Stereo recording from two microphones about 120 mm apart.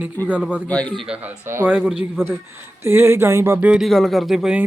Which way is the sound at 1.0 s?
10° right (ahead or behind).